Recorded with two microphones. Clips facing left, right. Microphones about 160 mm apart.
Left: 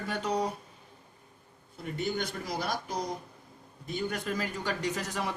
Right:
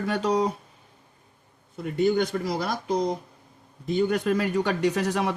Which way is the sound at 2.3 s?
60° right (ahead or behind).